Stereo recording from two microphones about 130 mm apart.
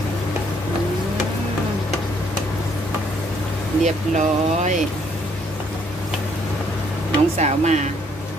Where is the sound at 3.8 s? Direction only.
65° right (ahead or behind).